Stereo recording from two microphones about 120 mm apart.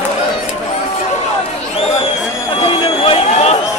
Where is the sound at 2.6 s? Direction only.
50° left (ahead or behind).